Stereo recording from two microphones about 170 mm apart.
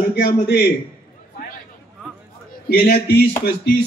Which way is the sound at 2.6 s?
70° left (ahead or behind).